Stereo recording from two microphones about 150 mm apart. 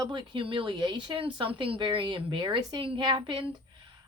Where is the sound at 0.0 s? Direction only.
30° right (ahead or behind).